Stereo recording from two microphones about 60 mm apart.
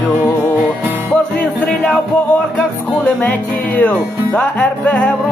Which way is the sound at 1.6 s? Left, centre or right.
Centre.